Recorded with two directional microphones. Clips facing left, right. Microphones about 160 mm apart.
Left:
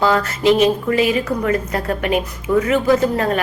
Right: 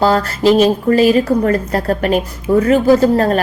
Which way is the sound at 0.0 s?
35° right (ahead or behind).